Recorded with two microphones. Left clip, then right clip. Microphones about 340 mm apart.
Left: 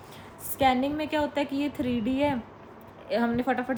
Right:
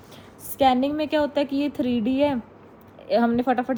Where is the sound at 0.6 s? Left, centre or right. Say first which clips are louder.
Right 4 dB; centre.